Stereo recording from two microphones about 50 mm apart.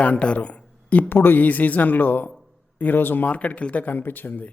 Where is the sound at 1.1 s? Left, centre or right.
Left.